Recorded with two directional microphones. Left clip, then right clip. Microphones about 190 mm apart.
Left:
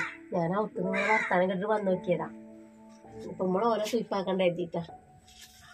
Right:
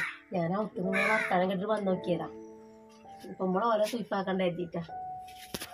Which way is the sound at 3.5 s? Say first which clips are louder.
Even; 10° left (ahead or behind).